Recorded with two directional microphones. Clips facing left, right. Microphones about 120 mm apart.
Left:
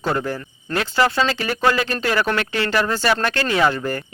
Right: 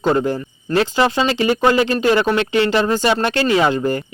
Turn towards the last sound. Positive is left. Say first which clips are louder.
# right 3 dB
turn(degrees=-20)  # may be behind; listen again after turning